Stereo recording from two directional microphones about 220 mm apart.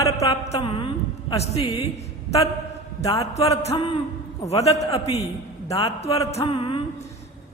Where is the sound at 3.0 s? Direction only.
30° left (ahead or behind).